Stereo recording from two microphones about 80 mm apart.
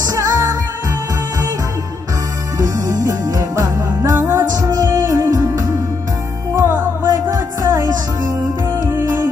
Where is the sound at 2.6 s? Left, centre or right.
Right.